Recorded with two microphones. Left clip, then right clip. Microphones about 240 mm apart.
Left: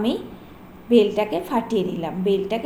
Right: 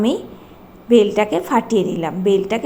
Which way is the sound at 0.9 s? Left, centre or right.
Right.